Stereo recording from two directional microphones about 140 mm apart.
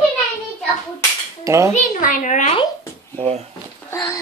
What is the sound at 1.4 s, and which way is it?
Dishes, 20° right (ahead or behind).